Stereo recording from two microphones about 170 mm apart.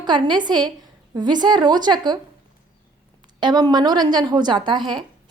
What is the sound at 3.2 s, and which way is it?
A woman's voice, 25° right (ahead or behind).